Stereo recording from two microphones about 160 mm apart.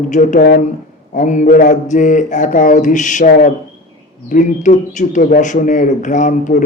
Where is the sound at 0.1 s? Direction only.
50° left (ahead or behind).